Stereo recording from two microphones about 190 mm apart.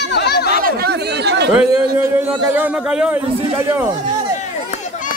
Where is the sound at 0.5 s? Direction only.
50° right (ahead or behind).